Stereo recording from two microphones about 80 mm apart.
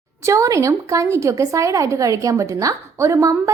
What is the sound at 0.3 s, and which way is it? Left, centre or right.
A woman's voice, right.